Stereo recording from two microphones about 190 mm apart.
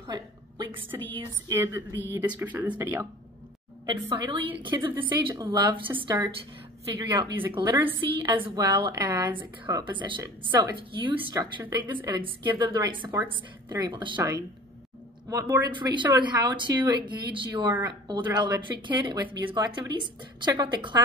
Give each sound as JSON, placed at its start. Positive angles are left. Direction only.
{"t": 0.0, "sound": "a woman's voice", "side_deg": -25}
{"t": 3.8, "sound": "speech", "side_deg": -25}